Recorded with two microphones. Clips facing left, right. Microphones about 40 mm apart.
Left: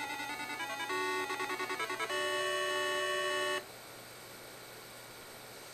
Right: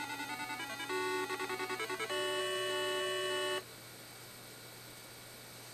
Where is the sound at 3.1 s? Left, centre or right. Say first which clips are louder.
Left 2 dB; left.